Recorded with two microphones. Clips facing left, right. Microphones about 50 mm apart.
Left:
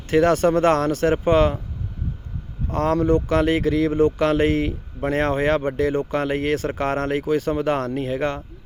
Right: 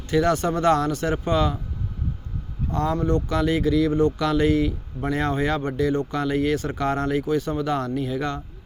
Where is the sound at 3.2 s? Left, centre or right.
Left.